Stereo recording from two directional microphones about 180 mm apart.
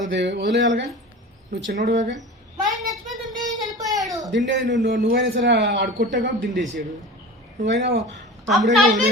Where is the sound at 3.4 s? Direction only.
20° right (ahead or behind).